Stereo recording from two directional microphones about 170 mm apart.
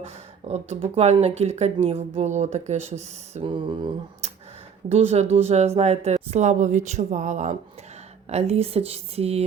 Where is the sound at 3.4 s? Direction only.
30° right (ahead or behind).